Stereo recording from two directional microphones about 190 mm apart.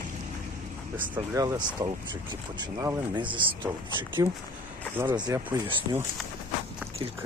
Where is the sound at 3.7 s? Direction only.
15° right (ahead or behind).